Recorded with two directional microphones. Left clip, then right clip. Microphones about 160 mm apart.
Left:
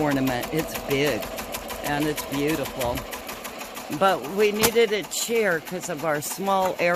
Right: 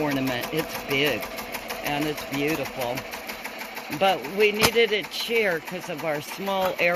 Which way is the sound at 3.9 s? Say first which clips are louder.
Left 1 dB; 15° left (ahead or behind).